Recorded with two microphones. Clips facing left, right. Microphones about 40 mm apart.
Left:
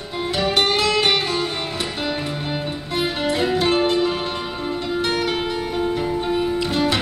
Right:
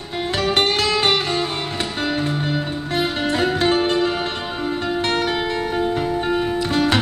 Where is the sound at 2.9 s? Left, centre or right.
Right.